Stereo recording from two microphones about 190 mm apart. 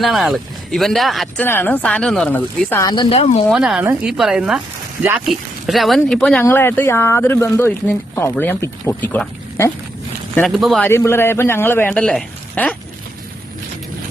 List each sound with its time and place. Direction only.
0.0 s speech: centre (ahead or behind)
1.5 s speech: 10° left (ahead or behind)
2.9 s speech: 30° left (ahead or behind)
3.5 s speech: 5° right (ahead or behind)
10.3 s speech: centre (ahead or behind)
10.8 s speech: 15° left (ahead or behind)